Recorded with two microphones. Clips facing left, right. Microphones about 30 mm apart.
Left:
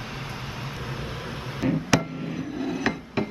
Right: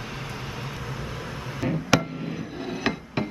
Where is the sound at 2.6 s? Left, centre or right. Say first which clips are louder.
Even; centre.